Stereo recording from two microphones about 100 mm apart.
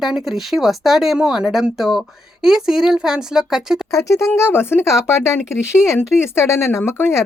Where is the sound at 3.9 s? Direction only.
30° left (ahead or behind).